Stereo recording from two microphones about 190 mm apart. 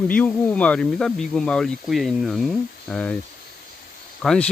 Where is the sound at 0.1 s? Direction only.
10° left (ahead or behind).